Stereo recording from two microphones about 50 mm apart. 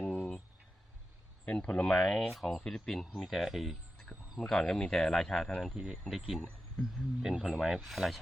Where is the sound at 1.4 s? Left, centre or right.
Centre.